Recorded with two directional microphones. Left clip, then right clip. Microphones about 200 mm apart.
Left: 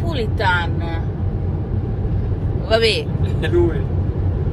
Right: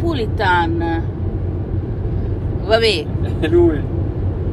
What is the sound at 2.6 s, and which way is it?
Speech, 30° right (ahead or behind).